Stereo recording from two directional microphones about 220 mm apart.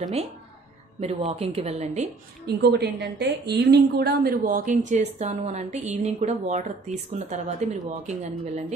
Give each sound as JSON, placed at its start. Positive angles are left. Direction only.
{"t": 0.0, "sound": "speech", "side_deg": -30}
{"t": 2.4, "sound": "a woman's voice", "side_deg": -45}